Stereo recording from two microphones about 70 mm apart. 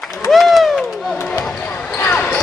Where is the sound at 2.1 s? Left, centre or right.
Centre.